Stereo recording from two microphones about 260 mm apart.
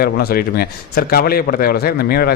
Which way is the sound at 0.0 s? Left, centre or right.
Left.